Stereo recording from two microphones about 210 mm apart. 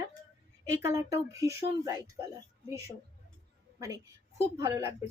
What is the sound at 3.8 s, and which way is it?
A woman's voice, 15° right (ahead or behind).